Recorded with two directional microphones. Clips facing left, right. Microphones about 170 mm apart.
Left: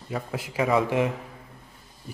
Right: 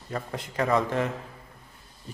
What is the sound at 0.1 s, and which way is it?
A man's voice, 5° left (ahead or behind).